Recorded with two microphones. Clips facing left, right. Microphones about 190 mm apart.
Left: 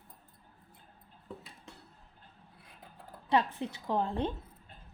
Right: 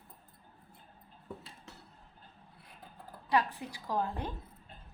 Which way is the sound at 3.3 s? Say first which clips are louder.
Left 2 dB; 25° left (ahead or behind).